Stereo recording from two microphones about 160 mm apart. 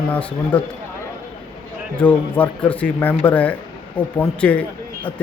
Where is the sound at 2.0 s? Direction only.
10° left (ahead or behind).